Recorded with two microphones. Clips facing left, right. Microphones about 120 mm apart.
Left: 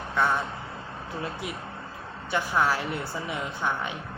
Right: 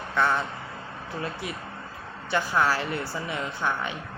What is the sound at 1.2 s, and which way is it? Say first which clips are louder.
Speech: right 1 dB; 10° left (ahead or behind).